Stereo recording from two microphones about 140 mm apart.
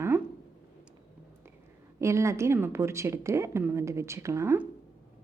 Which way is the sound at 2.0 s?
20° right (ahead or behind).